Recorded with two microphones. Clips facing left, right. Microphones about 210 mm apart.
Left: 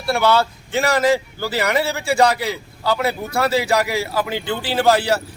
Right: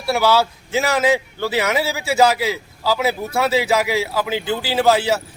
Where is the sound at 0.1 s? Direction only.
5° right (ahead or behind).